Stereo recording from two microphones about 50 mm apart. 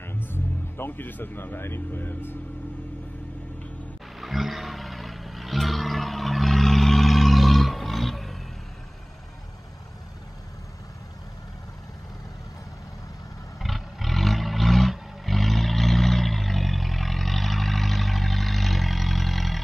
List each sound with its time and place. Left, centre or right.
0.0 s speech: left
4.2 s a sound: centre
13.6 s roar: centre